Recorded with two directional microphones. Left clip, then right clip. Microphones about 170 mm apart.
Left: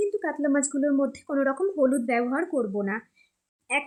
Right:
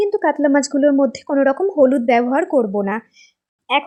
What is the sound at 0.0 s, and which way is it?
A woman's voice, 40° right (ahead or behind).